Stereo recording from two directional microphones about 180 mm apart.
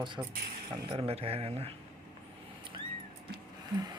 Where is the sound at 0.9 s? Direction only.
35° right (ahead or behind).